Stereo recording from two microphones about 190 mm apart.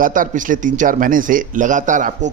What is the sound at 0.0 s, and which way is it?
A man's voice, 45° right (ahead or behind).